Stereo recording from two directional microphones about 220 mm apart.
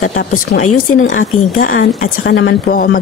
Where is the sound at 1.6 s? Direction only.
40° left (ahead or behind).